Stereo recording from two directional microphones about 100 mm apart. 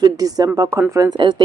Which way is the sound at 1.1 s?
45° right (ahead or behind).